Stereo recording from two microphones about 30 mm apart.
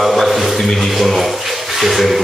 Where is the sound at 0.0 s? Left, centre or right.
Centre.